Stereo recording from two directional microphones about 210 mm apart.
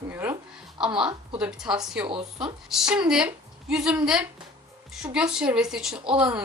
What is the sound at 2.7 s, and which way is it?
Speech, centre (ahead or behind).